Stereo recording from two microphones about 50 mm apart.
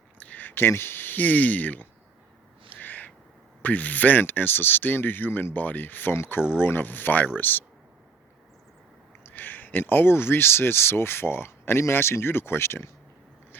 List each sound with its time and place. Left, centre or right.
0.2 s a sound: left
0.5 s speech: left
2.6 s owl: left
3.6 s speech: left
6.1 s speech: left
9.3 s speech: left